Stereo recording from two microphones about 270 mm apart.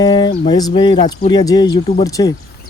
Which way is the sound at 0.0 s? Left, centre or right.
Centre.